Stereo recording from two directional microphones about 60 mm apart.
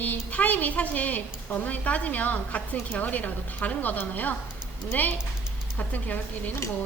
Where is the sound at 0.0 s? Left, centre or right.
Left.